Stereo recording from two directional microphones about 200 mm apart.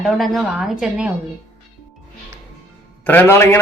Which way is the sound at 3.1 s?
10° left (ahead or behind).